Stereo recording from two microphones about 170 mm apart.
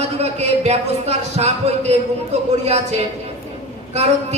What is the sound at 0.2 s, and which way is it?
A man's voice, 40° right (ahead or behind).